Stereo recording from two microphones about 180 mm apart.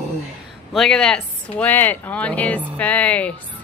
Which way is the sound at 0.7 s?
5° left (ahead or behind).